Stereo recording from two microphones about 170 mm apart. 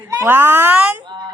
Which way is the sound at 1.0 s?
25° right (ahead or behind).